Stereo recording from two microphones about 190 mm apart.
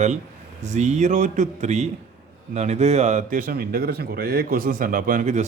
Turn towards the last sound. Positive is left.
turn(degrees=-40)  # may be behind; listen again after turning